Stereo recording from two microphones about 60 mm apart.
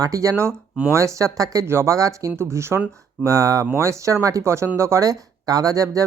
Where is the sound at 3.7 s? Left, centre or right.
Right.